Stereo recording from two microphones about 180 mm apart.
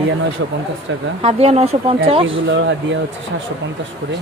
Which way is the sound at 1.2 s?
35° right (ahead or behind).